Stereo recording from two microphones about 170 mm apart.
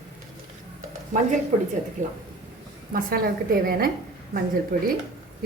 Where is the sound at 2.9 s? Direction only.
60° right (ahead or behind).